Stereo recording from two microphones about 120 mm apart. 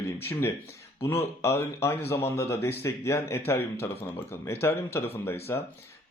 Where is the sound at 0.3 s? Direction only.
20° left (ahead or behind).